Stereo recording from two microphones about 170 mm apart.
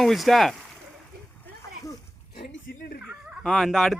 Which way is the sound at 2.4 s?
70° left (ahead or behind).